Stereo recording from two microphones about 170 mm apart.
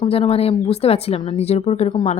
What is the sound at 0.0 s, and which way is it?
A woman's voice, 35° left (ahead or behind).